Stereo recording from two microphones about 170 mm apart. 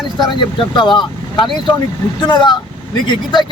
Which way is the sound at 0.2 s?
30° left (ahead or behind).